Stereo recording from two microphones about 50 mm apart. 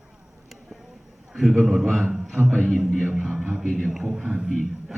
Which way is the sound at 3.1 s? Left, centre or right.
Centre.